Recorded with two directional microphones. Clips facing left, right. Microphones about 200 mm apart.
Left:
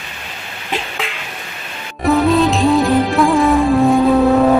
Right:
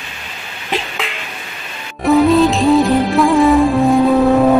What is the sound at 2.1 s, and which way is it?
Music, centre (ahead or behind).